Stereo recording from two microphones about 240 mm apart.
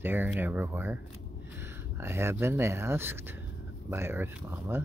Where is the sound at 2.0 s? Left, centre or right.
Centre.